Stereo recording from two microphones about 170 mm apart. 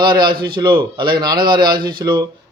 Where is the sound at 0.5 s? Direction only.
25° right (ahead or behind).